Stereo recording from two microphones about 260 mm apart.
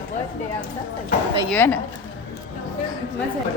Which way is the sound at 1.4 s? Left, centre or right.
Centre.